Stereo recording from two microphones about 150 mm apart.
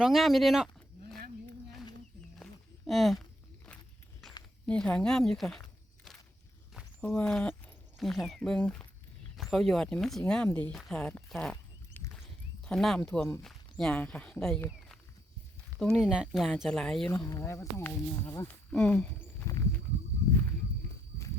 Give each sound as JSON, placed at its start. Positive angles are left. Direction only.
{"t": 0.0, "sound": "speech", "side_deg": 0}
{"t": 2.4, "sound": "a sound", "side_deg": 0}
{"t": 4.6, "sound": "speech", "side_deg": 5}
{"t": 7.0, "sound": "speech", "side_deg": 5}
{"t": 12.1, "sound": "a sound", "side_deg": 5}
{"t": 13.4, "sound": "speech", "side_deg": 5}
{"t": 17.1, "sound": "speech", "side_deg": 20}
{"t": 18.7, "sound": "speech", "side_deg": 5}